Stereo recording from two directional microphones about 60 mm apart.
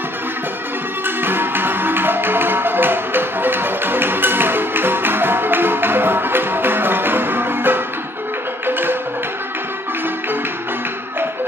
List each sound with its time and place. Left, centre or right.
1.0 s music: right